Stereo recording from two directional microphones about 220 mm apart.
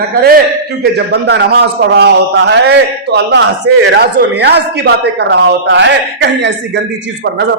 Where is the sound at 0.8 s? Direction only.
45° right (ahead or behind).